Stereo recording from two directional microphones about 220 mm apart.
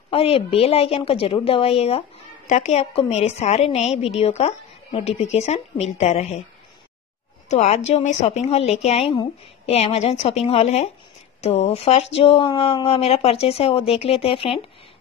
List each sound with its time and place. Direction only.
0.1 s a woman's voice: 25° left (ahead or behind)
7.4 s a woman's voice: 30° left (ahead or behind)